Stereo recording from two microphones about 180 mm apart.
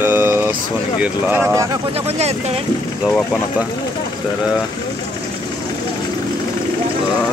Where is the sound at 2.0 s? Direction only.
35° right (ahead or behind).